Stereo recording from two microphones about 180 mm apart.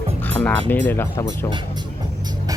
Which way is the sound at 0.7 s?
10° left (ahead or behind).